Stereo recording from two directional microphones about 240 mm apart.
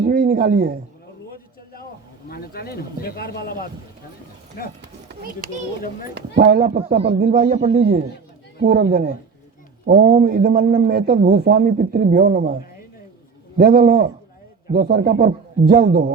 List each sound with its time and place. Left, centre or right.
0.0 s speech: right
2.3 s speech: left
4.8 s run: right
6.4 s a man's voice: right
13.6 s a man's voice: right